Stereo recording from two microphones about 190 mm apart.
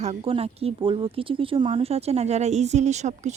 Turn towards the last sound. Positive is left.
turn(degrees=-35)  # may be behind; listen again after turning